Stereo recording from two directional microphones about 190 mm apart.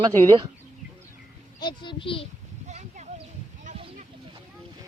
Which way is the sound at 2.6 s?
35° right (ahead or behind).